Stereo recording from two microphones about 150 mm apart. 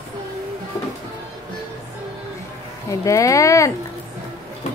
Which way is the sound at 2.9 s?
20° left (ahead or behind).